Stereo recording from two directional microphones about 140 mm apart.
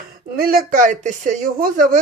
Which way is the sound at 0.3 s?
90° right.